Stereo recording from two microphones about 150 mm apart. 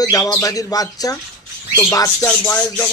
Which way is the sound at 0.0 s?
25° left (ahead or behind).